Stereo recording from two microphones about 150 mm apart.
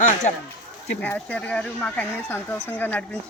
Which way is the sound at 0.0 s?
50° left (ahead or behind).